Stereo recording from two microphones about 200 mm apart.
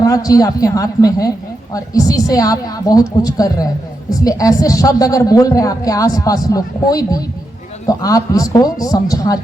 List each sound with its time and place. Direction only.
0.0 s speech: 15° left (ahead or behind)
7.9 s speech: 20° left (ahead or behind)